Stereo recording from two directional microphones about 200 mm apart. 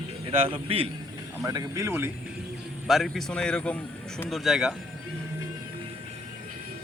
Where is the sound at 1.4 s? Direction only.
15° right (ahead or behind).